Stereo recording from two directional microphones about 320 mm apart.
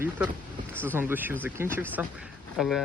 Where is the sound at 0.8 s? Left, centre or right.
Centre.